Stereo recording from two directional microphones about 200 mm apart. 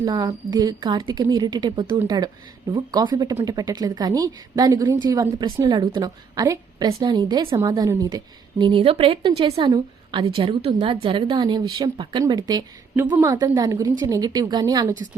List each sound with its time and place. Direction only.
0.0 s speech: 20° right (ahead or behind)
13.1 s a woman's voice: 10° right (ahead or behind)